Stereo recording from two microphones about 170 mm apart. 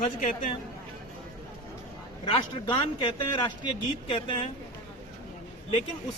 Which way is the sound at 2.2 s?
25° left (ahead or behind).